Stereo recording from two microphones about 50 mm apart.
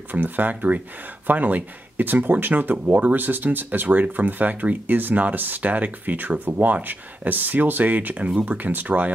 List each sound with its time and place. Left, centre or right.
0.1 s speech: right